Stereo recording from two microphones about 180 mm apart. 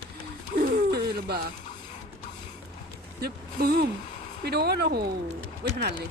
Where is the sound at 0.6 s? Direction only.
60° right (ahead or behind).